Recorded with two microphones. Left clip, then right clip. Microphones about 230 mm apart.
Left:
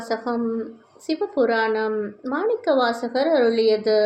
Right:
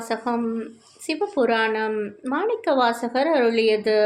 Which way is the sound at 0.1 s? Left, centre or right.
Right.